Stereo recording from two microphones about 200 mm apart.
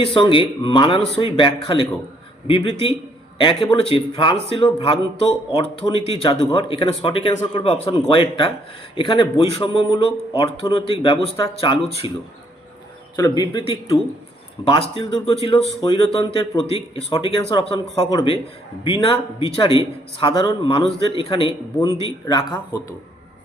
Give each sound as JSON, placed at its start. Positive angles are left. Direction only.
{"t": 0.0, "sound": "a man's voice", "side_deg": 25}
{"t": 3.3, "sound": "a man's voice", "side_deg": 25}
{"t": 13.1, "sound": "a man's voice", "side_deg": 20}